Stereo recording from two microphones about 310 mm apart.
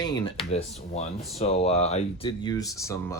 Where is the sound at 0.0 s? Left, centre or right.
Centre.